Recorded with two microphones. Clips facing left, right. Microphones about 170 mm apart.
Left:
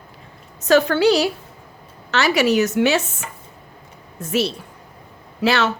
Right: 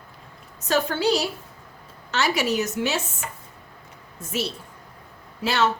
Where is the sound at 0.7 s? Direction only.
80° left.